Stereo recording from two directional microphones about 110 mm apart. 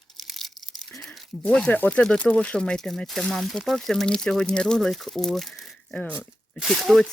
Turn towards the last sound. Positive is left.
turn(degrees=0)  # may be behind; listen again after turning